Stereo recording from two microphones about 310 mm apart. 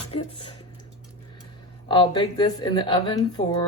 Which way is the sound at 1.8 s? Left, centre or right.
Centre.